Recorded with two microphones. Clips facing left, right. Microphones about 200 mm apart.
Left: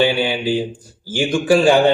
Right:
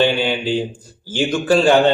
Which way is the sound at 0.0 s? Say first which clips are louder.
Even; 10° left (ahead or behind).